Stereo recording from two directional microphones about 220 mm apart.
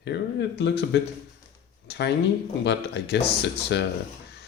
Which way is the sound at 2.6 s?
50° left (ahead or behind).